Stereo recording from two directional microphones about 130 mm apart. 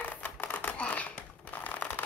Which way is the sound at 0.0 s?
10° left (ahead or behind).